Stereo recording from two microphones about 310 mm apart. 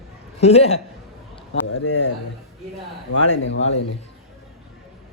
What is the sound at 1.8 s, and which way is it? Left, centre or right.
Speech, left.